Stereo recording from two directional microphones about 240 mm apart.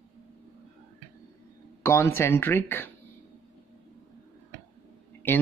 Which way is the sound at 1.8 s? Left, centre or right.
Centre.